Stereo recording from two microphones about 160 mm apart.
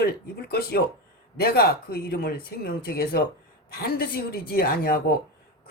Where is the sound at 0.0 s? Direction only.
80° left.